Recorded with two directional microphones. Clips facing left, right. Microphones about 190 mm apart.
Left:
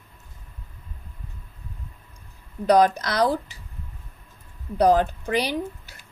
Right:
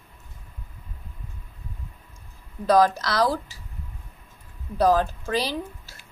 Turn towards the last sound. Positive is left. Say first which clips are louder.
# left 2 dB
turn(degrees=15)  # may be behind; listen again after turning